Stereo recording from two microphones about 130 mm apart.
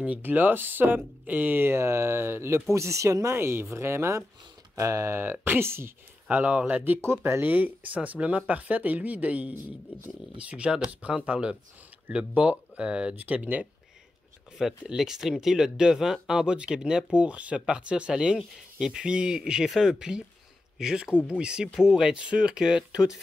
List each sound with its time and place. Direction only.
0.0 s speech: 10° right (ahead or behind)